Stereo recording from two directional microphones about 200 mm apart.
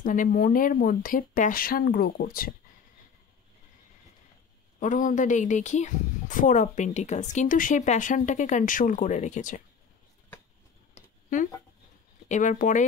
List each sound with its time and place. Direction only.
0.0 s speech: 40° left (ahead or behind)
4.7 s a woman's voice: 40° left (ahead or behind)
11.0 s a sound: 35° left (ahead or behind)
12.3 s a woman's voice: 40° left (ahead or behind)